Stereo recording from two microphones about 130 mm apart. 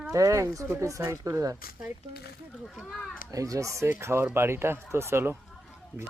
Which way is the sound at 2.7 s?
Centre (ahead or behind).